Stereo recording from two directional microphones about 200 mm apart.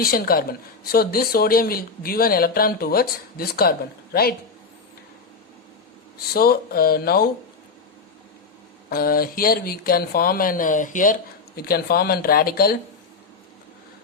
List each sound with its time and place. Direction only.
0.0 s speech: 45° left (ahead or behind)
6.3 s speech: 50° left (ahead or behind)
8.9 s speech: 45° left (ahead or behind)